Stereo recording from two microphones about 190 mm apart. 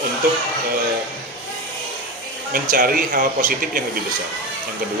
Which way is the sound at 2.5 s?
45° right (ahead or behind).